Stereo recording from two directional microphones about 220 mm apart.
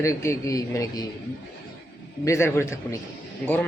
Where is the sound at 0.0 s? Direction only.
15° left (ahead or behind).